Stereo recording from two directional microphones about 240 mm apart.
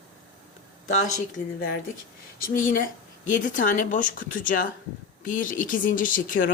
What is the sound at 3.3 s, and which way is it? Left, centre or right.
Speech, left.